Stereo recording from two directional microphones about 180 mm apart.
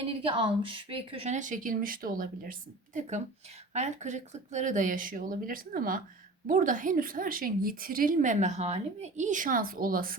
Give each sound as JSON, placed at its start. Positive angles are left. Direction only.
{"t": 0.0, "sound": "a woman's voice", "side_deg": -30}